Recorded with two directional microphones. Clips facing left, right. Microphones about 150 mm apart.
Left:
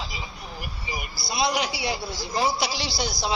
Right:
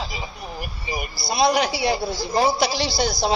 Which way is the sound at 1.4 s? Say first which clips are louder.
Right 6 dB; 55° right (ahead or behind).